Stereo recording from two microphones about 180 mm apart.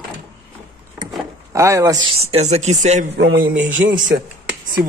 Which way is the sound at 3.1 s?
65° right (ahead or behind).